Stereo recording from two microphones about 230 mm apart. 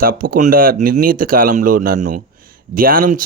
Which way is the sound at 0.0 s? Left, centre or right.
Right.